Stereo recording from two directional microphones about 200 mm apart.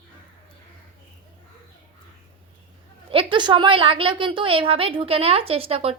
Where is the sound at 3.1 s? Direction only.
25° right (ahead or behind).